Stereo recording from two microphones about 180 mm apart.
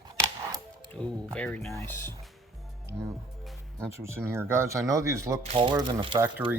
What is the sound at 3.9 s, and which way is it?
Speech, 15° right (ahead or behind).